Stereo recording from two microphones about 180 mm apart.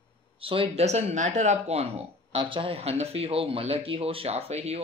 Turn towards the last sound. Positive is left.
turn(degrees=-35)  # may be behind; listen again after turning